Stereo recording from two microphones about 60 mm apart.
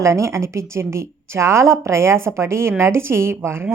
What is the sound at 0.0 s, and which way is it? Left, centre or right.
A woman's voice, right.